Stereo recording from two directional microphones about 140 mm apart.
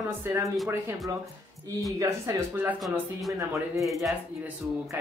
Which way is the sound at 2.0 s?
20° right (ahead or behind).